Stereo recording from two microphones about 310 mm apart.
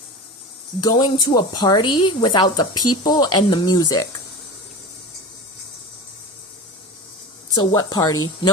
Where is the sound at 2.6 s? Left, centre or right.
Left.